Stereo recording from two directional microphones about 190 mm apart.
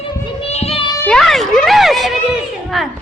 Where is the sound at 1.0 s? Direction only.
5° left (ahead or behind).